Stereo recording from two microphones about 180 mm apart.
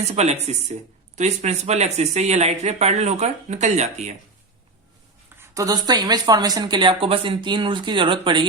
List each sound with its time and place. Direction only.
0.1 s speech: 35° right (ahead or behind)
5.4 s speech: 20° right (ahead or behind)